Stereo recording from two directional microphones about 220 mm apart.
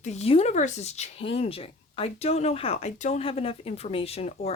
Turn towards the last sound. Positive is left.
turn(degrees=25)  # may be behind; listen again after turning